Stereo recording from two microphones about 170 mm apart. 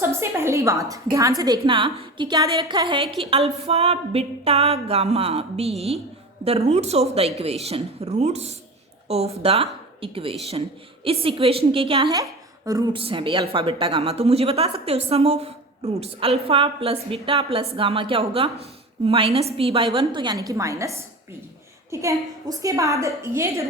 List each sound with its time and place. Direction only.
0.0 s a woman's voice: 15° right (ahead or behind); by 12.2 s 30° right (ahead or behind)
12.2 s a woman's voice: 20° right (ahead or behind)